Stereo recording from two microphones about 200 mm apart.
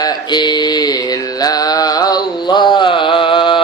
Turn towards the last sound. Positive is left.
turn(degrees=25)  # may be behind; listen again after turning